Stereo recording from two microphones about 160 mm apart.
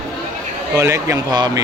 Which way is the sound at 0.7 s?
20° right (ahead or behind).